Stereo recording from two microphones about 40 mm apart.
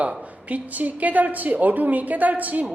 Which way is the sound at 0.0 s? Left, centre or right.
Right.